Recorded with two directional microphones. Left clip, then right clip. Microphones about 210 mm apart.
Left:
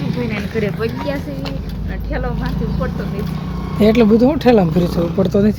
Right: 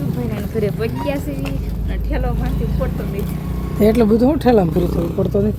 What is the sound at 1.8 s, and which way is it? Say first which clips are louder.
Speech: left 1 dB; 15° right (ahead or behind).